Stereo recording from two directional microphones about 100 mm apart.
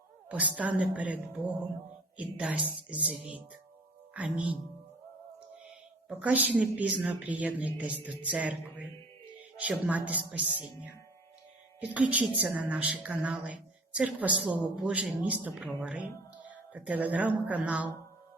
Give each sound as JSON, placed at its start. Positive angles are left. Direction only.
{"t": 0.3, "sound": "a woman's voice", "side_deg": -15}
{"t": 4.1, "sound": "a woman's voice", "side_deg": -15}
{"t": 6.1, "sound": "a woman's voice", "side_deg": -15}